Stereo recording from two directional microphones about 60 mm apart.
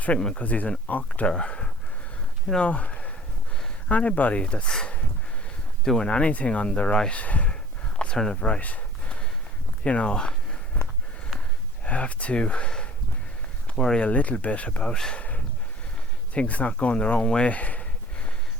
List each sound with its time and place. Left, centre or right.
0.2 s speech: centre
0.4 s speech: left
1.3 s speech: centre
6.1 s speech: centre
7.9 s a sound: centre
8.2 s speech: centre
9.8 s a sound: centre
11.9 s speech: left
14.0 s speech: left
16.3 s speech: left